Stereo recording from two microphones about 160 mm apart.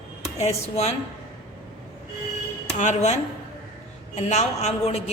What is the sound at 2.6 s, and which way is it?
Speech, 45° left (ahead or behind).